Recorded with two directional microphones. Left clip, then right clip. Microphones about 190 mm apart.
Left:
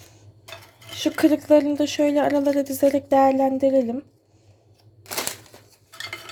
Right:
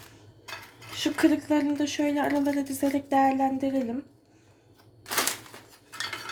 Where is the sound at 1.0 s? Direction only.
55° left (ahead or behind).